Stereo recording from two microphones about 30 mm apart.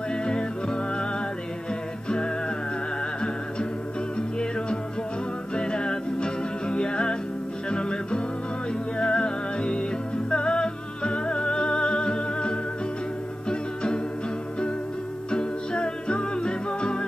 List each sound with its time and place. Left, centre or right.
0.1 s music: left
2.0 s music: left
5.6 s music: left
15.3 s music: left